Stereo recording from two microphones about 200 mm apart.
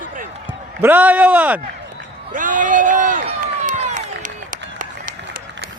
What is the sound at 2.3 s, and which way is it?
Speech, 40° right (ahead or behind).